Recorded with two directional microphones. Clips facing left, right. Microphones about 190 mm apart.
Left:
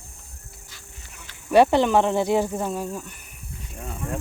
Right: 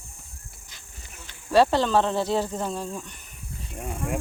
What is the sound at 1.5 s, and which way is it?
Speech, 20° left (ahead or behind).